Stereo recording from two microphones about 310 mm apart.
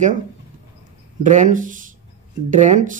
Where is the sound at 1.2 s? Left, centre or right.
Right.